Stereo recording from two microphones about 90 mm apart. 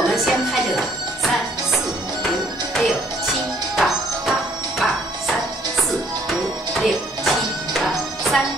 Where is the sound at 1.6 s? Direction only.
Centre (ahead or behind).